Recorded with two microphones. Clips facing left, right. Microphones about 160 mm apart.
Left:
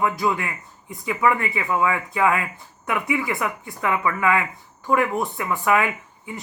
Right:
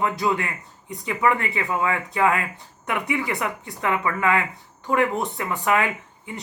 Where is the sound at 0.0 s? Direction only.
30° right (ahead or behind).